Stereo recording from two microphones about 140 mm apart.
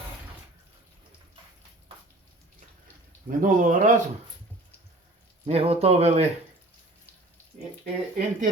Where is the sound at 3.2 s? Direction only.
70° right (ahead or behind).